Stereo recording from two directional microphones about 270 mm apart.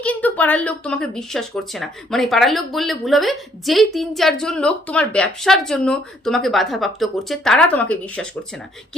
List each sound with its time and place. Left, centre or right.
0.0 s speech: centre